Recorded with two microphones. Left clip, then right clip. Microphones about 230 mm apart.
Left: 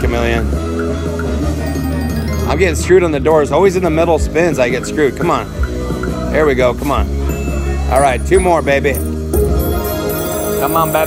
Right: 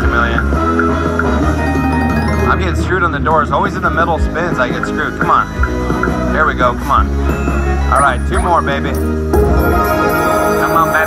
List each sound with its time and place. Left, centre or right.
0.1 s music: left
2.4 s speech: left